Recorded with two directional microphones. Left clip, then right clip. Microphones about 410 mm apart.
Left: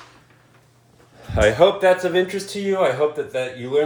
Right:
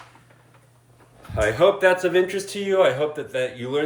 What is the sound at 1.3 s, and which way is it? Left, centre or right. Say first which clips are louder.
Speech: left 6 dB; left.